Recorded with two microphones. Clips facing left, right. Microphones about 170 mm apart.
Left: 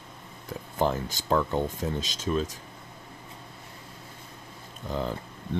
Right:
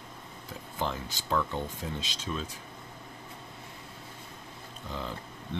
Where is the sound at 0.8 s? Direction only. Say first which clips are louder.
Left 7 dB; 45° left (ahead or behind).